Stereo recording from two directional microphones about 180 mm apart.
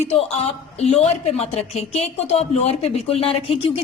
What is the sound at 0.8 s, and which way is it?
A woman's voice, 35° left (ahead or behind).